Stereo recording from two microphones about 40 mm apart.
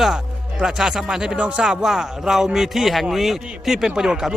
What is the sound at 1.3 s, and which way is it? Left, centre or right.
Speech, right.